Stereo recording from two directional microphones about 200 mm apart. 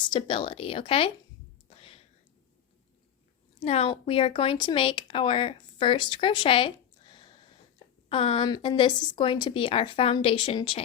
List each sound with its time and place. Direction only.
0.1 s speech: 25° left (ahead or behind)
1.7 s whispering: 30° left (ahead or behind)
3.6 s speech: 30° left (ahead or behind)